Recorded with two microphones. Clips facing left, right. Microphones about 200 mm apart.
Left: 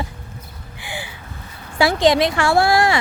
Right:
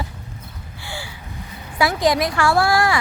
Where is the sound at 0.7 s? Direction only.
15° left (ahead or behind).